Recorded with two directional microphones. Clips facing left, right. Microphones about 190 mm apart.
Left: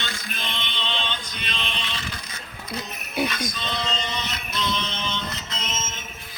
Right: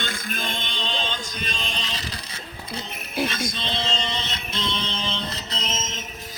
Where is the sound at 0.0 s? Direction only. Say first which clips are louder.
Right 3 dB; 50° right (ahead or behind).